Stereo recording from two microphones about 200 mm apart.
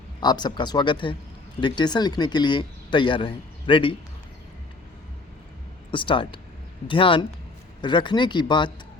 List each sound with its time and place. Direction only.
0.2 s speech: 20° left (ahead or behind)
5.9 s speech: 25° left (ahead or behind)